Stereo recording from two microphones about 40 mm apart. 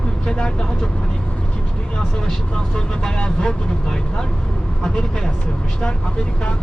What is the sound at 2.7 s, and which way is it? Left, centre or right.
Speech, left.